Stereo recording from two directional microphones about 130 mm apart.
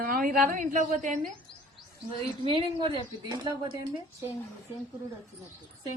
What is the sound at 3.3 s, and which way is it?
Speech, 30° right (ahead or behind).